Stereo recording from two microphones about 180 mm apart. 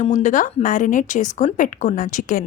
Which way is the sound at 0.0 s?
40° left (ahead or behind).